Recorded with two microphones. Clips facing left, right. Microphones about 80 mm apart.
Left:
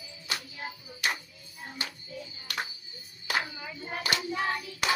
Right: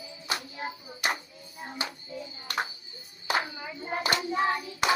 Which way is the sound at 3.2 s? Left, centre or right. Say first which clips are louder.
Right 3 dB; right.